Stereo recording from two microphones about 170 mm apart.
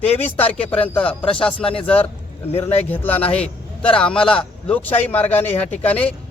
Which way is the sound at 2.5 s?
35° left (ahead or behind).